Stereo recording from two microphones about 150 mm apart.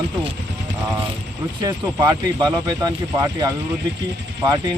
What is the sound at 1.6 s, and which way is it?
Speech, 30° right (ahead or behind).